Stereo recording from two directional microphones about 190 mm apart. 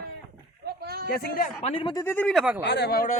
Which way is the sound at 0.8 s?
55° right (ahead or behind).